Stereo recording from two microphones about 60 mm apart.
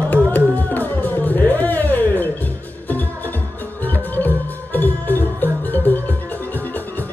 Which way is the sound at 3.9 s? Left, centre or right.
Left.